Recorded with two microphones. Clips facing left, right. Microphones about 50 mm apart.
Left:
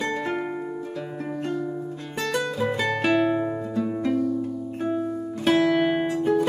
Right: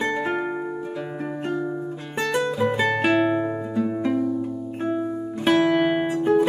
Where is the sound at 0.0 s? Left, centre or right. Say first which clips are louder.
Right 3 dB; right.